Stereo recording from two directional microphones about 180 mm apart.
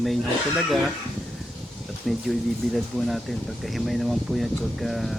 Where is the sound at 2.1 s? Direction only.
Centre (ahead or behind).